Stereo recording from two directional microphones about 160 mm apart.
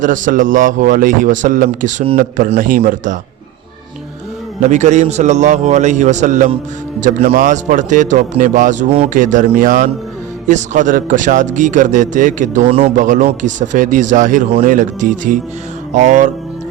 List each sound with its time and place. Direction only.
0.0 s a man's voice: 55° right (ahead or behind)
4.6 s a man's voice: 45° right (ahead or behind)